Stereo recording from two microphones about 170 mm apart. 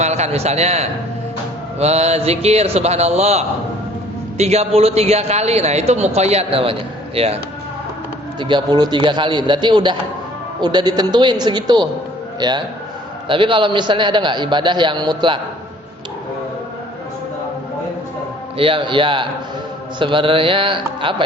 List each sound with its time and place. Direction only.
0.0 s a man's voice: 40° right (ahead or behind)
8.4 s a man's voice: 25° right (ahead or behind)
18.5 s a man's voice: 30° right (ahead or behind)